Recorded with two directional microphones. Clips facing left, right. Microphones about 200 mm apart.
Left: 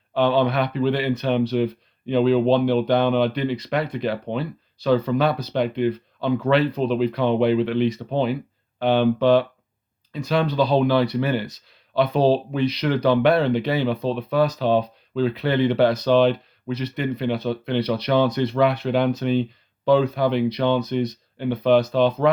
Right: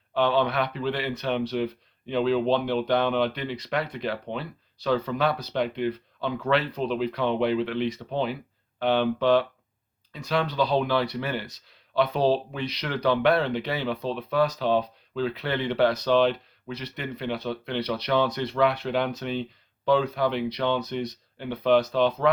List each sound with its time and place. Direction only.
0.1 s speech: 15° left (ahead or behind)
10.1 s speech: 25° left (ahead or behind)
10.6 s speech: 10° left (ahead or behind)
17.3 s speech: 25° left (ahead or behind)
17.7 s speech: 5° left (ahead or behind)